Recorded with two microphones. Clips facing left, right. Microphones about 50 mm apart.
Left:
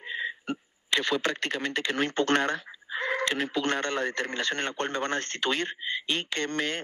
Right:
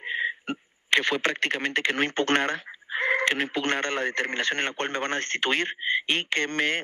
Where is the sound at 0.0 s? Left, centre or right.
Right.